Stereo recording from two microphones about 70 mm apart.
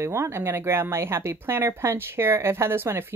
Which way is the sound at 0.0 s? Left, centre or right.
Right.